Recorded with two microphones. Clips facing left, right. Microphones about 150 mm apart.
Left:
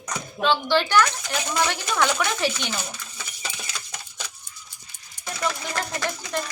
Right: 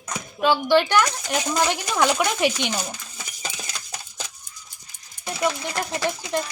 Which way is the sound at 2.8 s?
40° right (ahead or behind).